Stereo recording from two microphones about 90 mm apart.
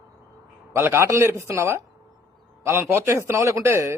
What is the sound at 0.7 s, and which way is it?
A man's voice, 30° right (ahead or behind).